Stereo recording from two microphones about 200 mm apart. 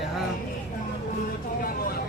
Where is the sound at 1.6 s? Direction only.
45° left (ahead or behind).